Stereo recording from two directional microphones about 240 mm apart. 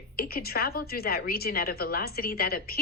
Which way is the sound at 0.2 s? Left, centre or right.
Left.